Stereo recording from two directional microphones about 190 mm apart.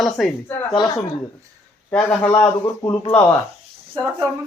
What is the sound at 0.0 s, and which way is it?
Speech, centre (ahead or behind).